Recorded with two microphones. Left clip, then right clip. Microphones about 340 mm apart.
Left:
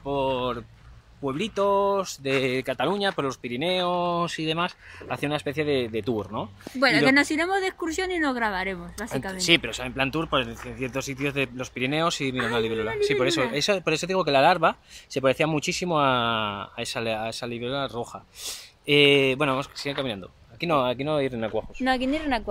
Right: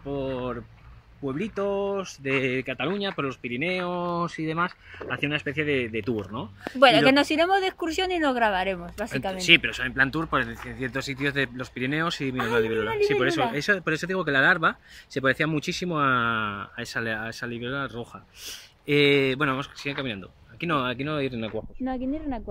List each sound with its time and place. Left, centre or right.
0.1 s a sound: centre
1.2 s speech: centre
6.8 s speech: centre
9.4 s speech: centre
21.5 s speech: left